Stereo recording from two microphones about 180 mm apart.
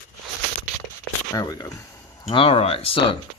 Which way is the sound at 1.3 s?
20° left (ahead or behind).